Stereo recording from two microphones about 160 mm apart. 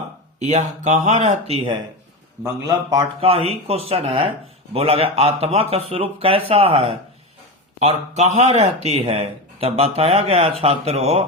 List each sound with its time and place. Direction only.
0.3 s speech: 50° right (ahead or behind)
2.4 s a man's voice: 25° right (ahead or behind)
3.2 s speech: 40° right (ahead or behind)